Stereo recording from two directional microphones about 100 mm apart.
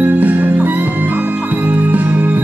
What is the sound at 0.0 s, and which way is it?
Music, 20° right (ahead or behind).